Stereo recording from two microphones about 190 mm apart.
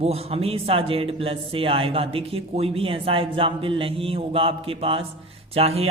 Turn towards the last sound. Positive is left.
turn(degrees=-30)  # may be behind; listen again after turning